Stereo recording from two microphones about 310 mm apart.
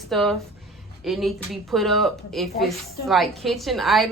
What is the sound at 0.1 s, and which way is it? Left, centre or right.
A woman's voice, centre.